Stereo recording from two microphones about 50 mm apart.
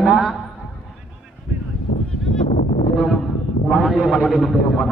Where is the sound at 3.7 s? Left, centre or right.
Centre.